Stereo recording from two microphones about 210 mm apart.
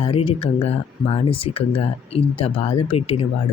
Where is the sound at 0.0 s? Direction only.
25° left (ahead or behind).